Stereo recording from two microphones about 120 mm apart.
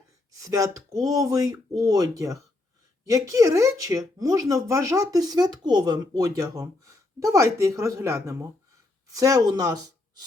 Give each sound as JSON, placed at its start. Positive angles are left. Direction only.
{"t": 0.3, "sound": "speech", "side_deg": -25}